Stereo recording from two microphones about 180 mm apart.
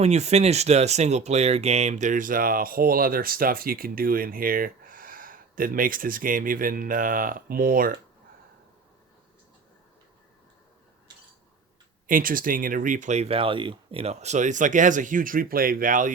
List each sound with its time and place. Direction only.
0.0 s speech: 35° right (ahead or behind)
12.0 s speech: 50° right (ahead or behind)